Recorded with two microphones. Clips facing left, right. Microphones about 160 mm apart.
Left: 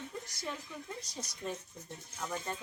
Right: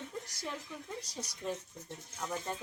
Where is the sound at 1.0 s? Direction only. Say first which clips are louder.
Even; 10° right (ahead or behind).